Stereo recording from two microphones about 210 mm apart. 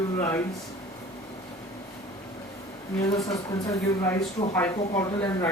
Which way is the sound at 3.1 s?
15° left (ahead or behind).